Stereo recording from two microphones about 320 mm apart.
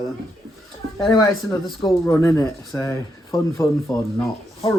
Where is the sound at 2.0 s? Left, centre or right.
Centre.